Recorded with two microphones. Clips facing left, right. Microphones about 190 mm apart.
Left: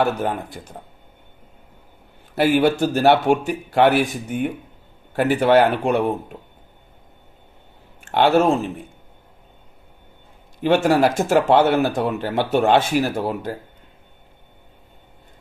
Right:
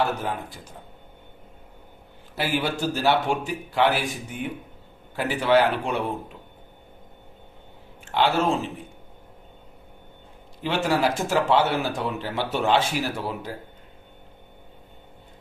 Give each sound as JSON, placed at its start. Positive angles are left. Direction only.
{"t": 0.6, "sound": "speech", "side_deg": 60}
{"t": 2.3, "sound": "speech", "side_deg": 55}
{"t": 8.0, "sound": "speech", "side_deg": 55}
{"t": 10.6, "sound": "speech", "side_deg": 55}